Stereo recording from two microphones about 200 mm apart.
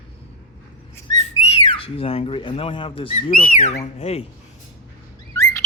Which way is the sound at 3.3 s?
40° left (ahead or behind).